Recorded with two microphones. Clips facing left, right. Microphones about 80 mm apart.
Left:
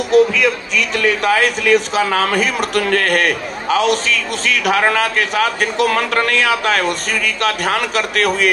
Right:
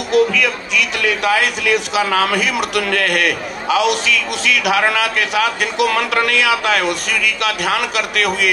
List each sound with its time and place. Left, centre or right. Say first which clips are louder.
0.1 s speech: left 2 dB; left